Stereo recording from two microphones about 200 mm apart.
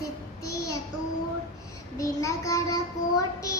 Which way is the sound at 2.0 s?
15° left (ahead or behind).